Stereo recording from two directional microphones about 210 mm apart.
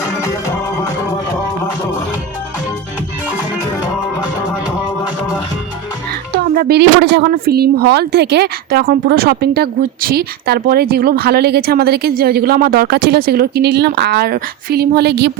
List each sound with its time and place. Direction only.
6.4 s speech: 45° right (ahead or behind)